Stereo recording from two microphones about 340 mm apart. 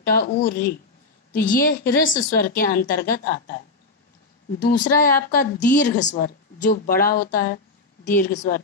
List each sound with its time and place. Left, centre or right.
0.0 s a woman's voice: left
4.6 s a woman's voice: left